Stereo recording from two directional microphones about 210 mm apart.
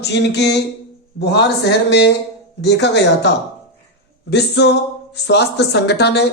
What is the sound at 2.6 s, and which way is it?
Speech, 55° left (ahead or behind).